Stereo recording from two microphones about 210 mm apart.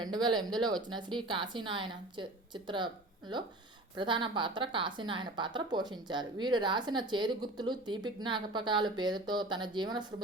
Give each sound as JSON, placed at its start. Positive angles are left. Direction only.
{"t": 0.0, "sound": "a woman's voice", "side_deg": -20}